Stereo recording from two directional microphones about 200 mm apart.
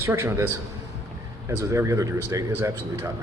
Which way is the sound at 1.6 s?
15° right (ahead or behind).